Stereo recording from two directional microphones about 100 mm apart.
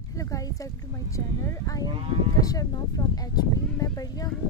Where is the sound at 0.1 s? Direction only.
35° left (ahead or behind).